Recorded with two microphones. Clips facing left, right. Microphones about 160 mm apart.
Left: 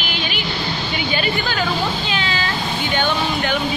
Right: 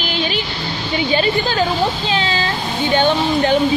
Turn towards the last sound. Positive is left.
turn(degrees=-30)  # may be behind; listen again after turning